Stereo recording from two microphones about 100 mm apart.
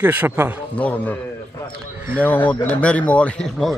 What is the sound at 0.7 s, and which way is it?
Speech, 15° left (ahead or behind).